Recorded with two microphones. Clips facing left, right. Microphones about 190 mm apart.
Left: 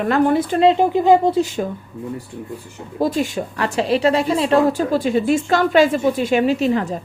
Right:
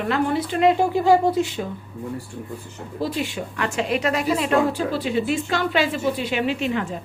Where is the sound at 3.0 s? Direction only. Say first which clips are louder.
Left 6 dB; 45° left (ahead or behind).